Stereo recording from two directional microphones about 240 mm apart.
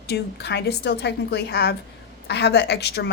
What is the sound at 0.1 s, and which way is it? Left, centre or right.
A woman's voice, left.